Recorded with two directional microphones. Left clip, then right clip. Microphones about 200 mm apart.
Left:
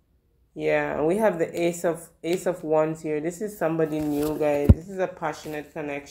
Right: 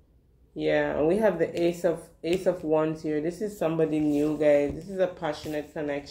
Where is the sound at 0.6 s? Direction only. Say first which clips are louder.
Left 1 dB; 20° left (ahead or behind).